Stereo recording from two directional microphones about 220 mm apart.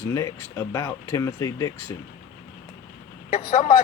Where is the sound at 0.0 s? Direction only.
15° left (ahead or behind).